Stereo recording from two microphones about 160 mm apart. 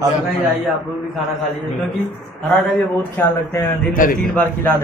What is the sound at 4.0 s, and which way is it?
Speech, 60° left (ahead or behind).